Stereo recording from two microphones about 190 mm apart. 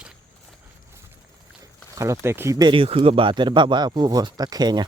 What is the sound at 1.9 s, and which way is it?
Speech, 15° right (ahead or behind).